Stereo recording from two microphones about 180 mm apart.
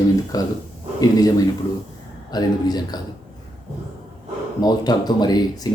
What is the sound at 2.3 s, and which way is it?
Speech, 20° left (ahead or behind).